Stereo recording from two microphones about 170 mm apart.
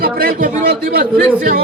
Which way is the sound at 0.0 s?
60° right (ahead or behind).